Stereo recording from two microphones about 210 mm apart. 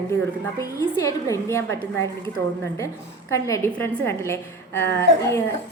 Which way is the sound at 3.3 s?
15° left (ahead or behind).